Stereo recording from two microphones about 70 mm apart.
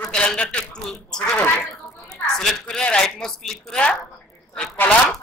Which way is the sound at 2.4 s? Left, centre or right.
Centre.